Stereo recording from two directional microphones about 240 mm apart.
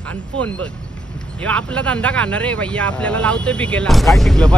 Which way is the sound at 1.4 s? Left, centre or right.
Centre.